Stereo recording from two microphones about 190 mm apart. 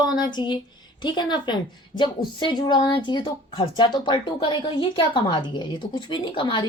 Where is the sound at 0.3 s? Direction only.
25° left (ahead or behind).